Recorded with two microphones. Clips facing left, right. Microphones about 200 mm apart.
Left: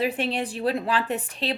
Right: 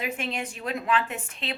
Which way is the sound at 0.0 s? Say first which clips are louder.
Left 6 dB; 35° left (ahead or behind).